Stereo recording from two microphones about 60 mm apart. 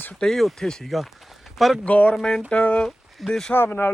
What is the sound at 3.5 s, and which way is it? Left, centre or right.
Speech, left.